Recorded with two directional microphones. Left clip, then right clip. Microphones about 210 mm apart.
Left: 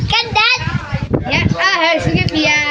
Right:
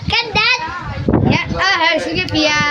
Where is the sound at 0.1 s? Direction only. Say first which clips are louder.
Left 1 dB; 30° right (ahead or behind).